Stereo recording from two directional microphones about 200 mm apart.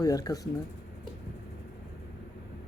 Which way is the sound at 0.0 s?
15° left (ahead or behind).